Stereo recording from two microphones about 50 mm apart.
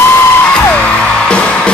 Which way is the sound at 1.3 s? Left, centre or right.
Left.